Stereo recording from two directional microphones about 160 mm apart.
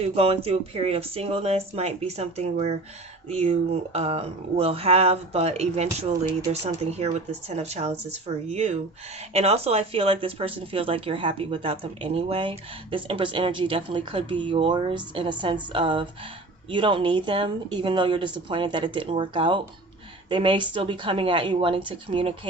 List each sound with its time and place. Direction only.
0.0 s speech: 40° right (ahead or behind)